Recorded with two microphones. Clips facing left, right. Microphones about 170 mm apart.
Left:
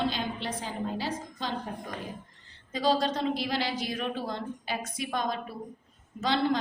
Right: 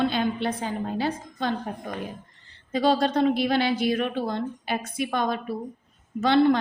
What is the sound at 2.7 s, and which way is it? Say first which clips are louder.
Speech: right 5 dB; 60° right (ahead or behind).